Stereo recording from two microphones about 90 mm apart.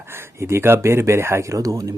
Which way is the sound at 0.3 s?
30° right (ahead or behind).